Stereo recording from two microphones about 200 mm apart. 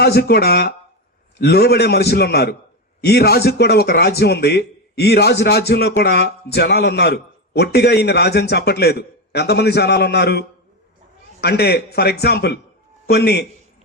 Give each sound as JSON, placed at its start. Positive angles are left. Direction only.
{"t": 0.0, "sound": "a man's voice", "side_deg": 55}